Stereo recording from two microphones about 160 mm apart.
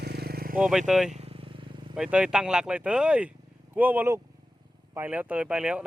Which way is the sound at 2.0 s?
5° right (ahead or behind).